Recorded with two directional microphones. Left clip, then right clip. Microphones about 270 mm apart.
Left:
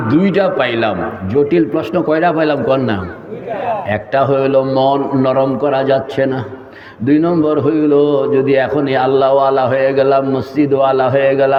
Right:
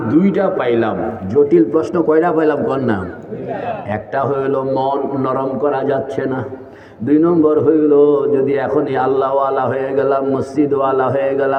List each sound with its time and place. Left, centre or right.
0.1 s a man's voice: left